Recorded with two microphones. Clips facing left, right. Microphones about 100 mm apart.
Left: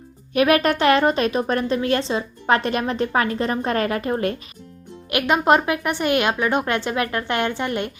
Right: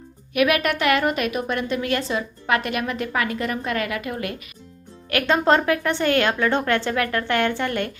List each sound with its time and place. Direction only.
0.3 s speech: 35° left (ahead or behind)
5.0 s speech: 15° left (ahead or behind)